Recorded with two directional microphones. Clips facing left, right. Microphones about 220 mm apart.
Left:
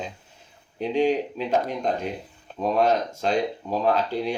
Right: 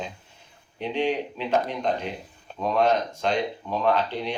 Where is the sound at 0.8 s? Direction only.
40° left (ahead or behind).